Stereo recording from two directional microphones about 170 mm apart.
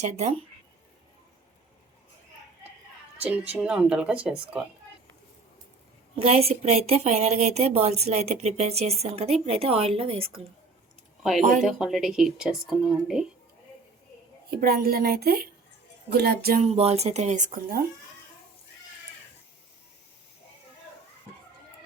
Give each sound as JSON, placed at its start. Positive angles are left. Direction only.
{"t": 0.0, "sound": "a woman's voice", "side_deg": -40}
{"t": 3.2, "sound": "speech", "side_deg": -10}
{"t": 6.2, "sound": "a woman's voice", "side_deg": -40}
{"t": 11.3, "sound": "speech", "side_deg": -50}
{"t": 11.6, "sound": "speech", "side_deg": 0}
{"t": 14.5, "sound": "a woman's voice", "side_deg": -60}
{"t": 16.7, "sound": "a woman's voice", "side_deg": -35}